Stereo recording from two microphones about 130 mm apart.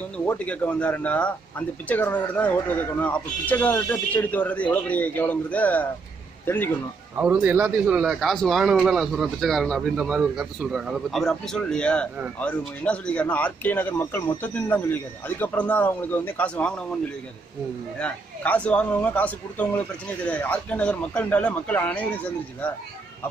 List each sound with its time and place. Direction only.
0.3 s a man's voice: 10° left (ahead or behind)
7.2 s speech: 10° right (ahead or behind); by 16.8 s 10° left (ahead or behind)
17.9 s speech: 10° left (ahead or behind)